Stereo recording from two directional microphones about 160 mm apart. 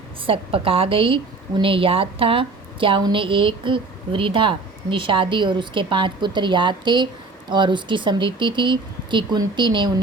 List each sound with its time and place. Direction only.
0.3 s a woman's voice: 35° right (ahead or behind)